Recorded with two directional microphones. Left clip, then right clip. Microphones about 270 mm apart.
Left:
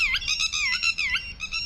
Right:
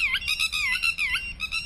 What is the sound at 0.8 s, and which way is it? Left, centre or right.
Music, centre.